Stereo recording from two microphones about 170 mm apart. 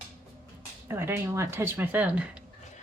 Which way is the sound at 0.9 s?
15° right (ahead or behind).